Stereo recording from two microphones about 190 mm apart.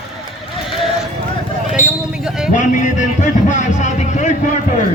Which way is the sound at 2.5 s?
40° left (ahead or behind).